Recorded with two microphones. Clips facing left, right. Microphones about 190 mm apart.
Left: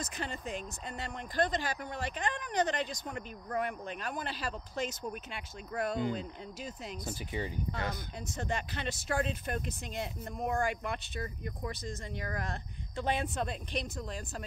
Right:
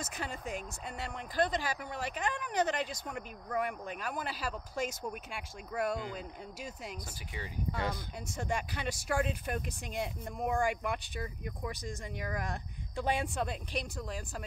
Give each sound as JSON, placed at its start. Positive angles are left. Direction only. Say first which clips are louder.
{"t": 0.0, "sound": "speech", "louder": "left 1 dB", "side_deg": -5}
{"t": 7.1, "sound": "speech", "louder": "left 7 dB", "side_deg": 25}
{"t": 8.3, "sound": "speech", "louder": "right 1 dB", "side_deg": -10}